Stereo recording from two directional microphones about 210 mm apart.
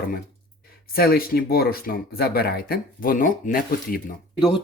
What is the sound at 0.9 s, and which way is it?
Speech, 45° left (ahead or behind).